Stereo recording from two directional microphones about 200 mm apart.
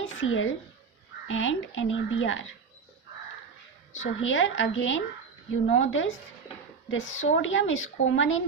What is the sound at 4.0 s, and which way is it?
A woman's voice, 75° left (ahead or behind).